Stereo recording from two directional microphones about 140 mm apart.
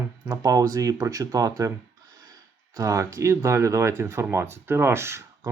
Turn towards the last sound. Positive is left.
turn(degrees=-20)  # may be behind; listen again after turning